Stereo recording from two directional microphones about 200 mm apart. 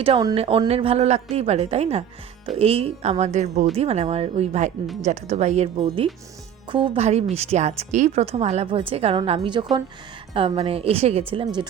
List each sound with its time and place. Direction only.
0.0 s a woman's voice: 25° right (ahead or behind)